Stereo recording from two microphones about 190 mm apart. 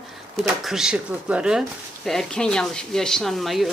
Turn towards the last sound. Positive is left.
turn(degrees=0)  # may be behind; listen again after turning